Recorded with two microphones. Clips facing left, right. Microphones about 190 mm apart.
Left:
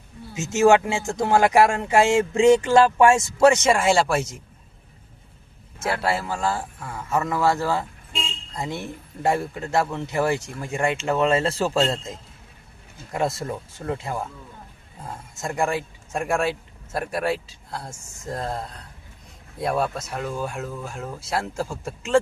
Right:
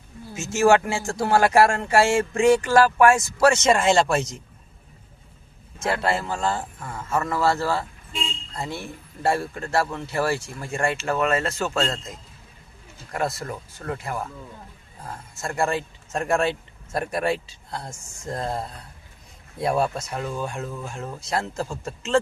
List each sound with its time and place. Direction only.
0.3 s speech: 20° left (ahead or behind)
5.8 s speech: 5° left (ahead or behind)